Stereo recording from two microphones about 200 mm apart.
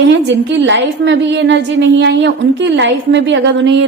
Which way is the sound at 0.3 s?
60° right (ahead or behind).